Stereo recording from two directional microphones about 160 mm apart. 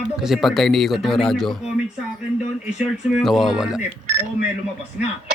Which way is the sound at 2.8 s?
5° right (ahead or behind).